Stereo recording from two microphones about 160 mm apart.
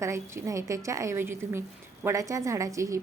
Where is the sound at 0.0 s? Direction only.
15° right (ahead or behind).